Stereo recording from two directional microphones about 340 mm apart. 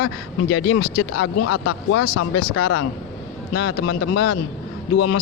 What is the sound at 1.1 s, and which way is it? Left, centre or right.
Speech, left.